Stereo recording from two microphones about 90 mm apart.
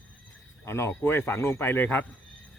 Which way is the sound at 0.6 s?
30° left (ahead or behind).